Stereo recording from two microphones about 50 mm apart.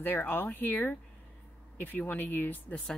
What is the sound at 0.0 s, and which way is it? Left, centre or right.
Speech, left.